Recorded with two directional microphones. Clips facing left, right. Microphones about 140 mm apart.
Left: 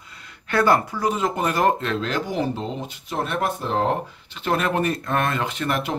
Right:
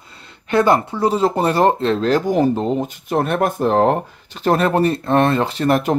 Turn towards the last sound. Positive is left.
turn(degrees=-40)  # may be behind; listen again after turning